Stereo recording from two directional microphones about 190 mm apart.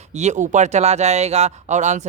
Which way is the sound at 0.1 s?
35° right (ahead or behind).